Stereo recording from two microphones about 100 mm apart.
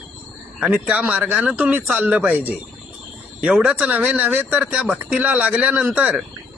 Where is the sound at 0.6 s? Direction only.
10° right (ahead or behind).